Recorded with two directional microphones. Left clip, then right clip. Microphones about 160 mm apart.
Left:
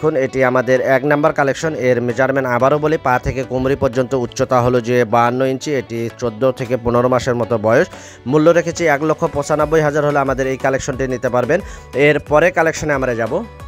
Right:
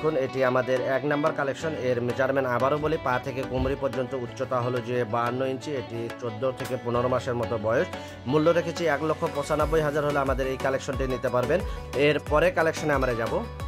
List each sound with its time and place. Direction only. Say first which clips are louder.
0.0 s speech: left 9 dB; 50° left (ahead or behind)